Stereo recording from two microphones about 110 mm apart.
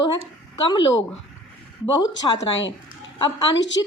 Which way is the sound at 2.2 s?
40° left (ahead or behind).